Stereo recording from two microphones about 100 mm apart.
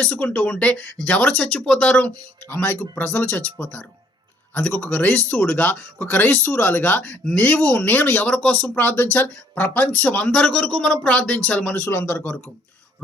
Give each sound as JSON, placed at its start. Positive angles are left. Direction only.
{"t": 0.0, "sound": "speech", "side_deg": 10}
{"t": 8.3, "sound": "speech", "side_deg": 5}
{"t": 8.6, "sound": "a man's voice", "side_deg": 15}